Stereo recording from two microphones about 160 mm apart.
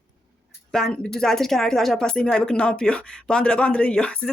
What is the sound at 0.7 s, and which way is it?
Speech, 5° left (ahead or behind).